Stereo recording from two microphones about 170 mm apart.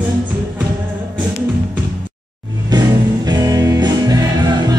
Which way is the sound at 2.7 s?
25° right (ahead or behind).